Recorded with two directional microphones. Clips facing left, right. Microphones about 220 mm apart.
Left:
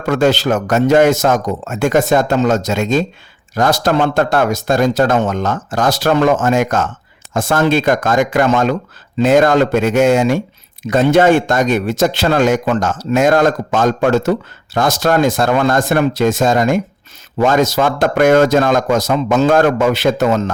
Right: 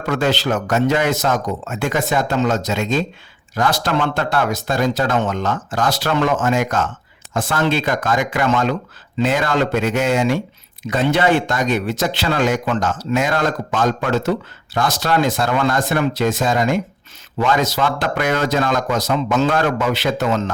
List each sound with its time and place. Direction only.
0.0 s speech: 45° left (ahead or behind)